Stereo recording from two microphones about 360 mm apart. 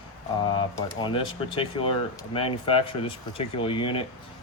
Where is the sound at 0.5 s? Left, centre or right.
Centre.